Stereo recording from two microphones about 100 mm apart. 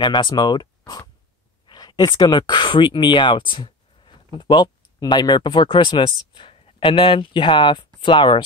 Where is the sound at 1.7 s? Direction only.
45° left (ahead or behind).